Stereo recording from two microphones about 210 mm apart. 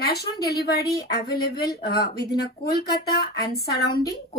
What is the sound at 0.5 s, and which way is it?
Speech, 50° left (ahead or behind).